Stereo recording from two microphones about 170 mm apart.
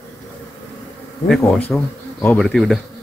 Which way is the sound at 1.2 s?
Centre (ahead or behind).